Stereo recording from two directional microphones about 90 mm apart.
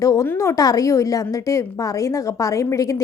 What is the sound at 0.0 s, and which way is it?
A woman's voice, 40° left (ahead or behind).